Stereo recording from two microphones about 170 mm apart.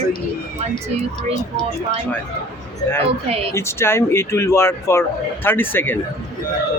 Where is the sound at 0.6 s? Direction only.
40° right (ahead or behind).